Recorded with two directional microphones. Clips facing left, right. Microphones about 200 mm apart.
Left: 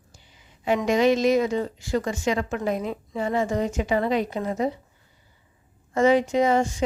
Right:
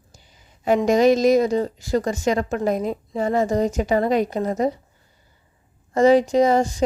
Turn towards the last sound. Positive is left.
turn(degrees=-35)  # may be behind; listen again after turning